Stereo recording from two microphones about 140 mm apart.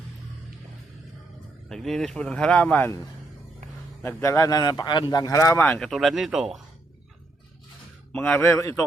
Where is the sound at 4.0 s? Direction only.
20° left (ahead or behind).